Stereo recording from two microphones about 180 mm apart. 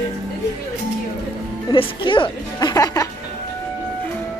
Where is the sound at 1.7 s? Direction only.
25° left (ahead or behind).